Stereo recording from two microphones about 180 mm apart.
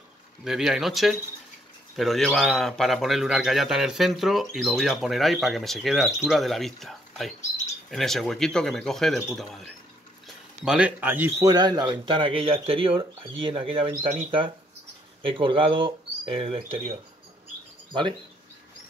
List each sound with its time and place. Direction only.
0.4 s a man's voice: centre (ahead or behind)
11.4 s speech: 20° right (ahead or behind)